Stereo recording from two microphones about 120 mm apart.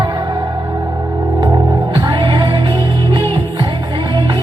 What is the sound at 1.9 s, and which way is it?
Music, 40° right (ahead or behind).